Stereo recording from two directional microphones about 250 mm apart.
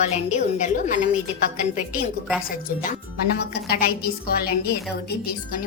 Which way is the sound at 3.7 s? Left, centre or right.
Left.